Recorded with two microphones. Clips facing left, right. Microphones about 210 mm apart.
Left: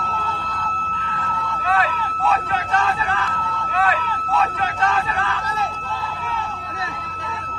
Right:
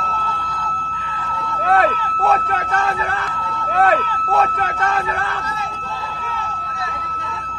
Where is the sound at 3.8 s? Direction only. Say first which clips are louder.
Right 6 dB; 50° right (ahead or behind).